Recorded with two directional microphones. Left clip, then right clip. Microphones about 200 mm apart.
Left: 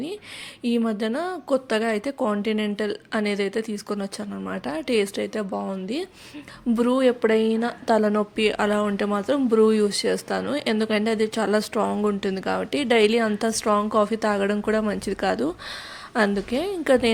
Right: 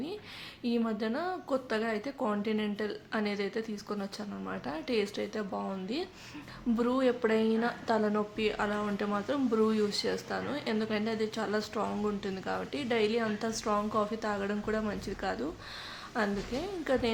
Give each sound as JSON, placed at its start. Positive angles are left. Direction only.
{"t": 0.6, "sound": "a woman's voice", "side_deg": 35}